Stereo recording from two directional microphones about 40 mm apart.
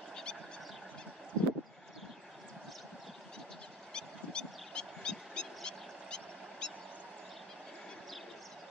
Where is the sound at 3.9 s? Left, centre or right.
Left.